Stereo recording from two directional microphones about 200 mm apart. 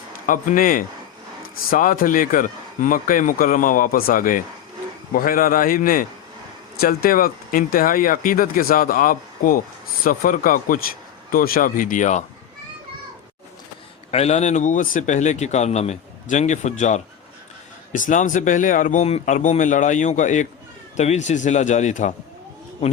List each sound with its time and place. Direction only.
0.3 s speech: 45° left (ahead or behind)
14.1 s speech: 35° left (ahead or behind)